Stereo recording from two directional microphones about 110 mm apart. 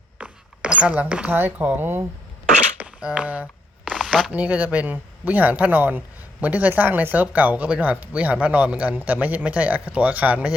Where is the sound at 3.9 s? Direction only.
Centre (ahead or behind).